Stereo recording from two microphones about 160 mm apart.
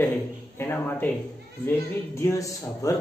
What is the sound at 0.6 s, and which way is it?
Speech, 15° left (ahead or behind).